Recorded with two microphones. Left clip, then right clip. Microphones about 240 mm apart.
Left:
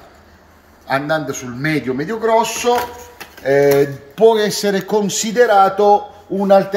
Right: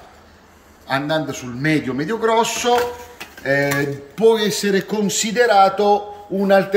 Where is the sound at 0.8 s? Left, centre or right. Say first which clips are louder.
Left 2 dB; centre.